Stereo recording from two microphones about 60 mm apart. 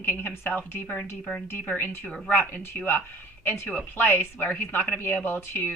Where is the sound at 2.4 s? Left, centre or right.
Left.